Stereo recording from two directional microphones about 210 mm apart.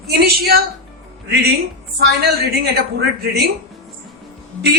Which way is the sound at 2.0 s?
50° right (ahead or behind).